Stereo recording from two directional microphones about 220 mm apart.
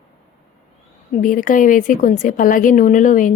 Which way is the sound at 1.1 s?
35° left (ahead or behind).